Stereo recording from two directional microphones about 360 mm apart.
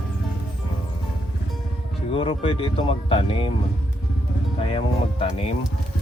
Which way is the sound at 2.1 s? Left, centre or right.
Centre.